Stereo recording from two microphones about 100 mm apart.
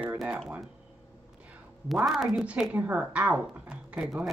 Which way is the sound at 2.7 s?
15° right (ahead or behind).